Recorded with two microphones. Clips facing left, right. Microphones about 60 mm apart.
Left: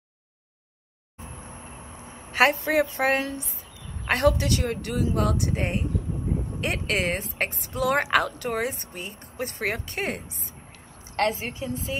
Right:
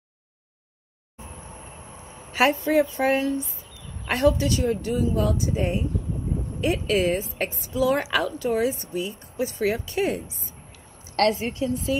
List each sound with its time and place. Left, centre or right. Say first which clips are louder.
2.3 s speech: right 1 dB; left
4.1 s a woman's voice: right 1 dB; left
11.3 s a woman's voice: right 6 dB; left
11.7 s speech: right 5 dB; left